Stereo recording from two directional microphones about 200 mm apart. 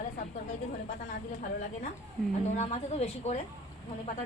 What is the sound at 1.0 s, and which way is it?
A woman's voice, 40° left (ahead or behind).